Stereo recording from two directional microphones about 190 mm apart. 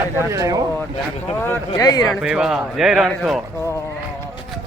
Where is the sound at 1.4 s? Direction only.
10° left (ahead or behind).